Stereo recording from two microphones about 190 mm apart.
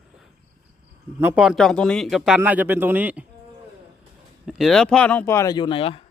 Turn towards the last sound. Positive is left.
turn(degrees=30)  # may be behind; listen again after turning